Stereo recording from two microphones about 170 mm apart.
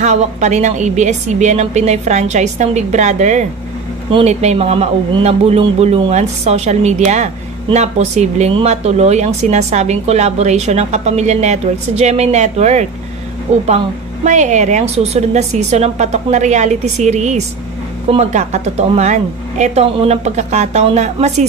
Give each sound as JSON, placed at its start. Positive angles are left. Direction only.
{"t": 0.0, "sound": "a woman's voice", "side_deg": -45}